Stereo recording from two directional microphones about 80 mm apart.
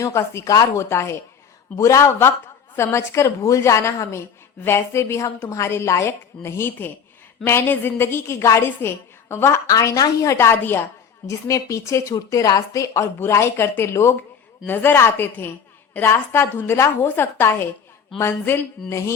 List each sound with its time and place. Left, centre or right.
0.0 s a woman's voice: left
11.3 s a woman's voice: left